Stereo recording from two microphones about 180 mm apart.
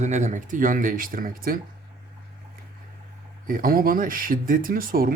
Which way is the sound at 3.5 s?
55° right (ahead or behind).